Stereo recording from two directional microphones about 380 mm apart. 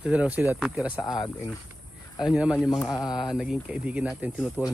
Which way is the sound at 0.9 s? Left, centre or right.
Centre.